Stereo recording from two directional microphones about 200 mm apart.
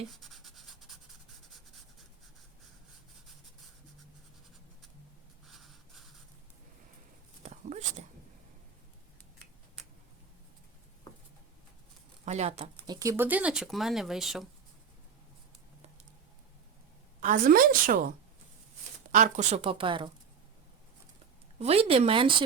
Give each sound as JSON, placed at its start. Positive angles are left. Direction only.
{"t": 0.1, "sound": "a sound", "side_deg": 0}
{"t": 7.4, "sound": "a sound", "side_deg": -35}
{"t": 12.2, "sound": "speech", "side_deg": -35}
{"t": 13.0, "sound": "speech", "side_deg": -15}
{"t": 17.2, "sound": "a woman's voice", "side_deg": -40}
{"t": 19.1, "sound": "a woman's voice", "side_deg": -35}
{"t": 21.6, "sound": "a woman's voice", "side_deg": -30}